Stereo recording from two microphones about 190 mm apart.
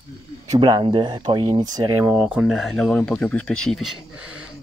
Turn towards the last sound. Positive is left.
turn(degrees=0)  # may be behind; listen again after turning